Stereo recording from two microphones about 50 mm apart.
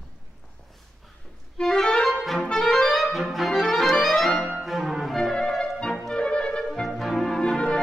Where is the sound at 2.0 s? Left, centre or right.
Centre.